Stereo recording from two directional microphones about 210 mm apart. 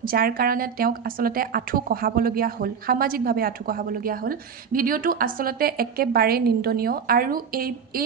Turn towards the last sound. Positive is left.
turn(degrees=-45)  # may be behind; listen again after turning